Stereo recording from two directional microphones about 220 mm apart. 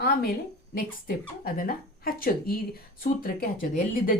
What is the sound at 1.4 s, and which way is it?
Speech, 40° left (ahead or behind).